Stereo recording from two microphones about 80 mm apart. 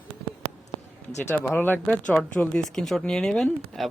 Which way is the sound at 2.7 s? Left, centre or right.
Centre.